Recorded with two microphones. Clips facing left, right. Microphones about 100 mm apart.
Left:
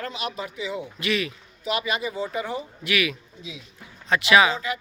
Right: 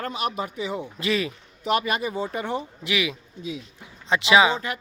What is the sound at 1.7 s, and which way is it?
Speech, 50° right (ahead or behind).